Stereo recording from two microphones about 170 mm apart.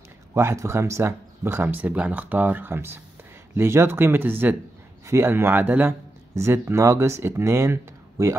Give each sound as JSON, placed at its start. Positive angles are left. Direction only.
{"t": 0.3, "sound": "speech", "side_deg": -15}